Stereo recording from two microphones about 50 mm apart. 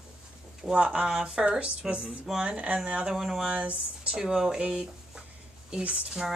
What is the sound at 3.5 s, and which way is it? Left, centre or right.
Speech, right.